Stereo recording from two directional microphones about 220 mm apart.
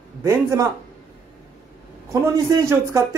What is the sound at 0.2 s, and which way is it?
Speech, 15° right (ahead or behind).